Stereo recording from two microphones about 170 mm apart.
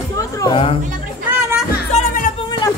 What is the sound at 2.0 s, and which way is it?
Music, 50° left (ahead or behind).